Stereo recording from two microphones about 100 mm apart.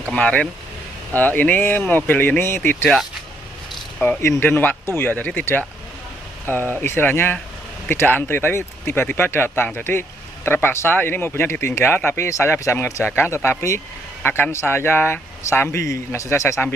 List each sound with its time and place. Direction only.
0.1 s speech: 10° left (ahead or behind)
4.3 s speech: 20° left (ahead or behind)
12.3 s speech: 30° left (ahead or behind)